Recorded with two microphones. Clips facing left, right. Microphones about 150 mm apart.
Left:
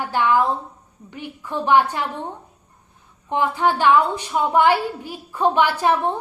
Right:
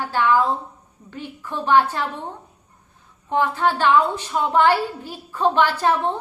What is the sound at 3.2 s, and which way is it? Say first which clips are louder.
A woman's voice: even; 15° left (ahead or behind).